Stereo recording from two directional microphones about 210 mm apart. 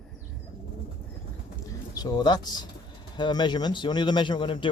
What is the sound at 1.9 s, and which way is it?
Speech, 20° left (ahead or behind).